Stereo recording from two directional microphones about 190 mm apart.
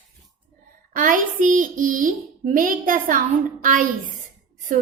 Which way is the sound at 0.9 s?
45° right (ahead or behind).